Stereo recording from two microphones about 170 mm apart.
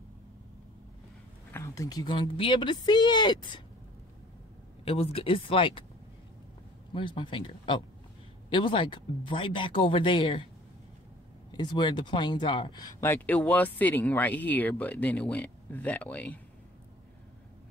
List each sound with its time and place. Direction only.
1.5 s speech: 20° left (ahead or behind)
4.8 s speech: 35° left (ahead or behind)
6.9 s speech: 30° left (ahead or behind)
11.5 s speech: 25° left (ahead or behind); by 16.3 s 10° left (ahead or behind)